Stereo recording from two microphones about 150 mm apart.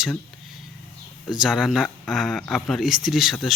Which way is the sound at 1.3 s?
5° right (ahead or behind).